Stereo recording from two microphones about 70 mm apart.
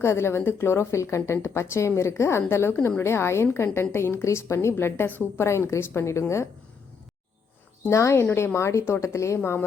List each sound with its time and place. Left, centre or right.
0.0 s a woman's voice: left
4.7 s a woman's voice: left
5.5 s a woman's voice: left
7.9 s a woman's voice: left
9.4 s a woman's voice: left